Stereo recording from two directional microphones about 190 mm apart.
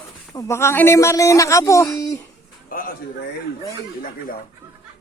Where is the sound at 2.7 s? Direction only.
50° left (ahead or behind).